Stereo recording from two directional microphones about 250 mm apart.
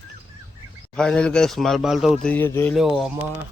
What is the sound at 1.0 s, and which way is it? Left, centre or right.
A man's voice, centre.